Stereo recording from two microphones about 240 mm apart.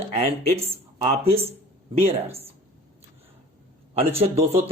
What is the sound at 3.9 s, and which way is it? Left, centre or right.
Speech, right.